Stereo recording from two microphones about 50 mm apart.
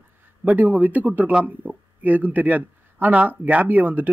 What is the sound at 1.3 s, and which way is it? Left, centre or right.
Speech, centre.